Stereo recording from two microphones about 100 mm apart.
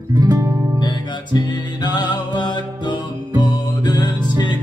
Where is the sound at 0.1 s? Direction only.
40° right (ahead or behind).